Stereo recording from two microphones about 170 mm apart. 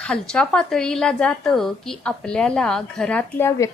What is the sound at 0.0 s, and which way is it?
A woman's voice, 5° left (ahead or behind).